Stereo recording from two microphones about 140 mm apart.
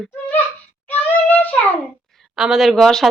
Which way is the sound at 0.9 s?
10° left (ahead or behind).